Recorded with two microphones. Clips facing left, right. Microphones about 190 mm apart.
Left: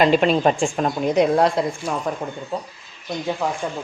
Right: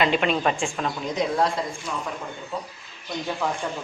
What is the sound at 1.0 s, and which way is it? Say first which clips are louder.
Speech: left 7 dB; 65° left (ahead or behind).